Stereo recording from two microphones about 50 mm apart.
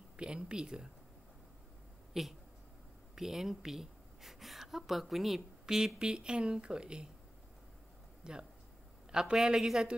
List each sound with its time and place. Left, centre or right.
0.2 s speech: centre
2.1 s a man's voice: centre
8.2 s a man's voice: centre